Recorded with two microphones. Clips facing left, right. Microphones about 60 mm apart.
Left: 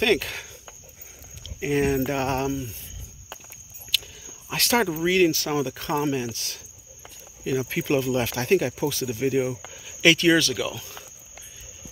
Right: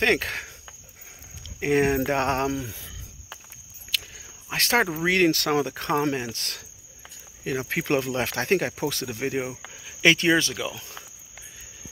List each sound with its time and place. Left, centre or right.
0.0 s speech: right
1.6 s a sound: right
2.4 s speech: right
3.9 s speech: right
9.8 s speech: right